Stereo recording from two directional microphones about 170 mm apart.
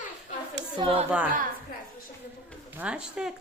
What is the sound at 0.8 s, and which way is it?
Speech, 35° right (ahead or behind).